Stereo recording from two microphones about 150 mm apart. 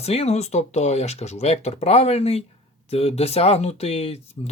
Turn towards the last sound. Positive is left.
turn(degrees=40)  # may be behind; listen again after turning